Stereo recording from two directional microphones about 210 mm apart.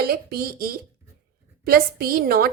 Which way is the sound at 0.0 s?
45° right (ahead or behind).